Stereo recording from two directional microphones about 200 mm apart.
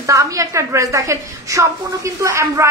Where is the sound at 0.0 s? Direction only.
15° right (ahead or behind).